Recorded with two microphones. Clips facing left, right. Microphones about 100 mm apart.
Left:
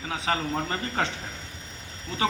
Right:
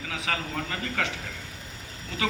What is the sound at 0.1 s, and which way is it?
A man's voice, 30° left (ahead or behind).